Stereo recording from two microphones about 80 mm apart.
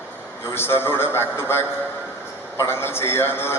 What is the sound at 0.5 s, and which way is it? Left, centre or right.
A man's voice, left.